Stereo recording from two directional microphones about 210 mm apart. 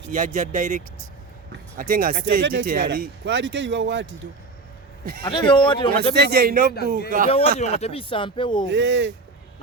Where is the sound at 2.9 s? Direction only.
55° right (ahead or behind).